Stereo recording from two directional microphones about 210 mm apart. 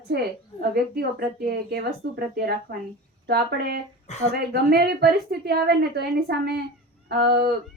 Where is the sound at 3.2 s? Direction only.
50° right (ahead or behind).